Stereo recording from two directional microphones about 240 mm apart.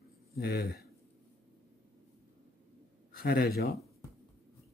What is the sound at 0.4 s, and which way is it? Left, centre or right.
Speech, left.